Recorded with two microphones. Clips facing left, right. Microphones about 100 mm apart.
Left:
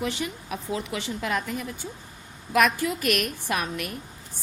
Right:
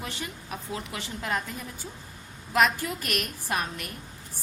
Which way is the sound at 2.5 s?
70° left (ahead or behind).